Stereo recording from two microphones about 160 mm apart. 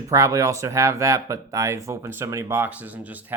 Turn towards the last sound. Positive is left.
turn(degrees=-10)  # may be behind; listen again after turning